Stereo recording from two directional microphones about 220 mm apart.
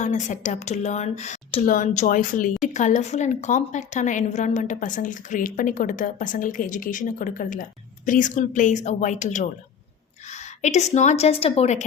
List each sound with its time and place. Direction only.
0.0 s a woman's voice: 35° left (ahead or behind)